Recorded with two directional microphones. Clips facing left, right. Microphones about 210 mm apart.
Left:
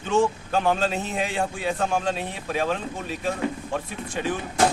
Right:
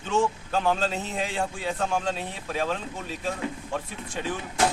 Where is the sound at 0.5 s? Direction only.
60° left (ahead or behind).